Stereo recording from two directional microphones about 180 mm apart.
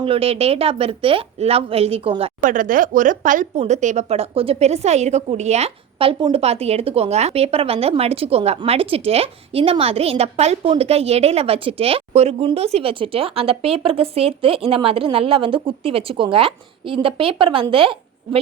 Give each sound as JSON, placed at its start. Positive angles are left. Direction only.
{"t": 0.0, "sound": "speech", "side_deg": -30}
{"t": 2.4, "sound": "speech", "side_deg": -45}